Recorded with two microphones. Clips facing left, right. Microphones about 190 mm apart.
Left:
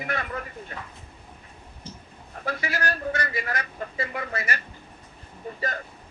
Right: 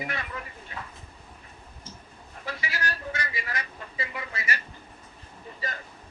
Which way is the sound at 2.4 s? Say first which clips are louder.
Left 5 dB; 50° left (ahead or behind).